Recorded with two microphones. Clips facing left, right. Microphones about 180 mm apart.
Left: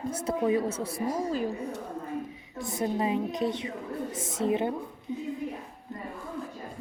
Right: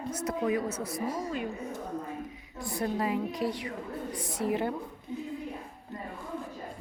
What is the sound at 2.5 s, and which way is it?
A woman's voice, 20° left (ahead or behind).